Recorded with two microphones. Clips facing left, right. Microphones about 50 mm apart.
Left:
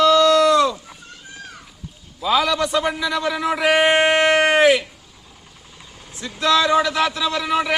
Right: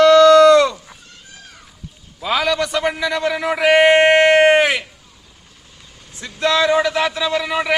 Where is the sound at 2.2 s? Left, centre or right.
Right.